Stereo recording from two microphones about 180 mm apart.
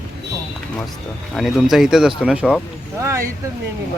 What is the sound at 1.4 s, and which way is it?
A man's voice, centre (ahead or behind).